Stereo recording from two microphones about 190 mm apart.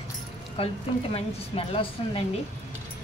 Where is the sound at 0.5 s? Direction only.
30° left (ahead or behind).